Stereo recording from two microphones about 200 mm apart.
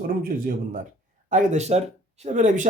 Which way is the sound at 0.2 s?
45° right (ahead or behind).